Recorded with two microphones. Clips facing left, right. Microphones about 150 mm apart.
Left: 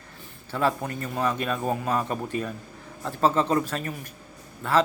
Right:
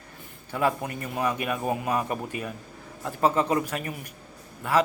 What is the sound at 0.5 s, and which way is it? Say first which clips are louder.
Speech: left 1 dB; 15° right (ahead or behind).